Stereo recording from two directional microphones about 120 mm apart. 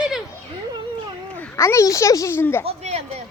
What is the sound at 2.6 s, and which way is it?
Speech, 65° right (ahead or behind).